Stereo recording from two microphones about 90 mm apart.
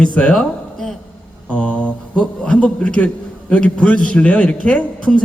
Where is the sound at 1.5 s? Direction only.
15° left (ahead or behind).